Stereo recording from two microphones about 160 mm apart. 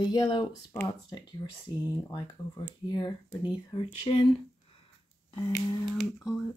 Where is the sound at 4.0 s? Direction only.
35° left (ahead or behind).